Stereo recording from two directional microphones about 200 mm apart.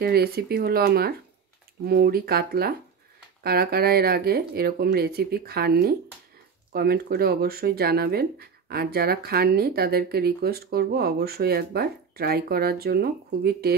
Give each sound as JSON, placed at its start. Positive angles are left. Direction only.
{"t": 0.0, "sound": "speech", "side_deg": -50}